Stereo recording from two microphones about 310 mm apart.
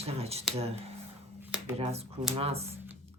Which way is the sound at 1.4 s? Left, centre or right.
Centre.